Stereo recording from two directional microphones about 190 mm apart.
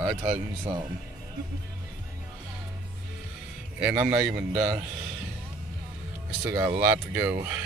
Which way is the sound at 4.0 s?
25° right (ahead or behind).